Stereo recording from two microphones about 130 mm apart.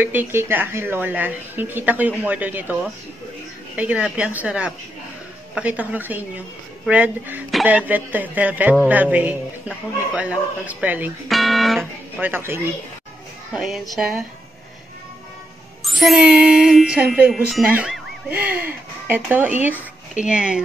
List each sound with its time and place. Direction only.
0.0 s a woman's voice: 15° right (ahead or behind)
11.2 s speech: centre (ahead or behind)
12.2 s a woman's voice: 15° right (ahead or behind)
13.5 s speech: 5° right (ahead or behind)
15.8 s a woman's voice: centre (ahead or behind)